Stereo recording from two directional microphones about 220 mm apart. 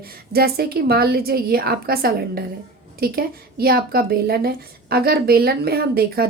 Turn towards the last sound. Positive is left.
turn(degrees=-45)  # may be behind; listen again after turning